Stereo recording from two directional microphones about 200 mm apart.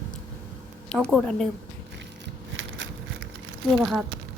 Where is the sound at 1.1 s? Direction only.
Centre (ahead or behind).